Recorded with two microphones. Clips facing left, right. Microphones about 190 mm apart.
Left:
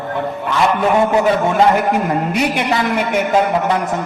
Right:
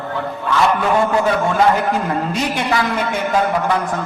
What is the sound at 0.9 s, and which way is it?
A man's voice, 20° left (ahead or behind).